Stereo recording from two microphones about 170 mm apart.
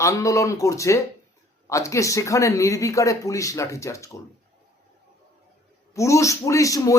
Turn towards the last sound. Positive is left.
turn(degrees=20)  # may be behind; listen again after turning